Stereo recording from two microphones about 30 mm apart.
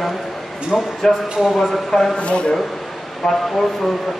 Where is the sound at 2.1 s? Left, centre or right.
Left.